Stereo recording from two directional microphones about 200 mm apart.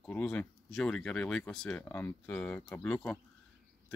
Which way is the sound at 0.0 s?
5° left (ahead or behind).